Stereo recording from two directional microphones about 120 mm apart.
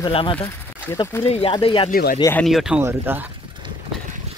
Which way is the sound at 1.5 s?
45° left (ahead or behind).